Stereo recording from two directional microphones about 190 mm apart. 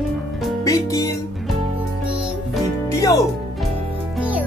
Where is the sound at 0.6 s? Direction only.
15° left (ahead or behind).